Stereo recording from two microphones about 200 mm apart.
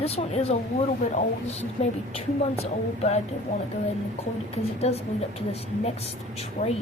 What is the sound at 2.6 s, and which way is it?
Speech, 35° left (ahead or behind).